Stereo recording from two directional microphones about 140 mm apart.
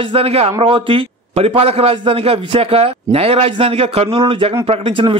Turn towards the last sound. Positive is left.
turn(degrees=-40)  # may be behind; listen again after turning